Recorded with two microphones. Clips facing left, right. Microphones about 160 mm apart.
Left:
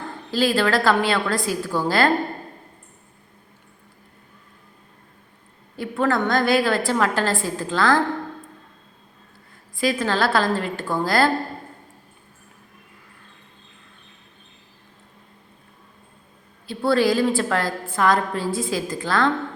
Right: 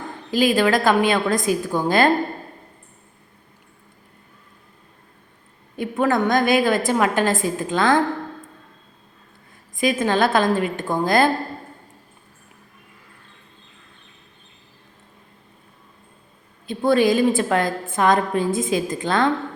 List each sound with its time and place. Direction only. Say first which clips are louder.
0.3 s a woman's voice: right 2 dB; 15° right (ahead or behind)
5.7 s a woman's voice: right 2 dB; 20° right (ahead or behind)
9.7 s a woman's voice: right 2 dB; 20° right (ahead or behind)
16.6 s a woman's voice: right 2 dB; 20° right (ahead or behind)